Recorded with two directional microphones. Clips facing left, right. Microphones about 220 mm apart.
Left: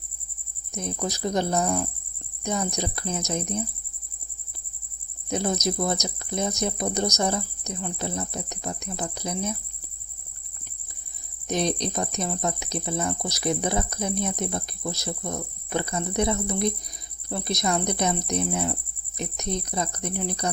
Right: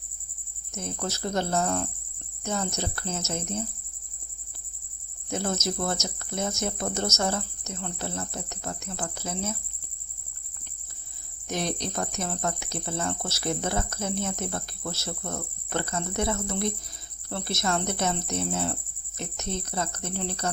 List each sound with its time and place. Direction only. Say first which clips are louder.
0.7 s speech: left 3 dB; 15° left (ahead or behind)
5.3 s speech: left 3 dB; 15° left (ahead or behind)
11.4 s speech: left 4 dB; 20° left (ahead or behind)